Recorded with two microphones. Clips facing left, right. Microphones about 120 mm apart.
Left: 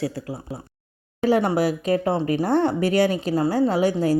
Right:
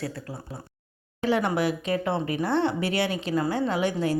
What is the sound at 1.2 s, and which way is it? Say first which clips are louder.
A woman's voice: left 5 dB; 40° left (ahead or behind).